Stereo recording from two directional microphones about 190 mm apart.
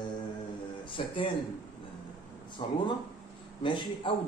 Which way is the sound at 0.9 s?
30° left (ahead or behind).